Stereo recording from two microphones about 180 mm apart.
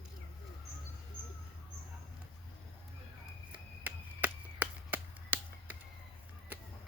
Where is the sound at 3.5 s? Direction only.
10° right (ahead or behind).